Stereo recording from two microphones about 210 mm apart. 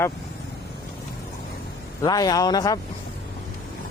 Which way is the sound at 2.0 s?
20° left (ahead or behind).